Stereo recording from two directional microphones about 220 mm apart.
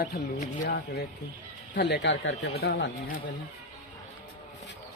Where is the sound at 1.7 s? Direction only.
50° left (ahead or behind).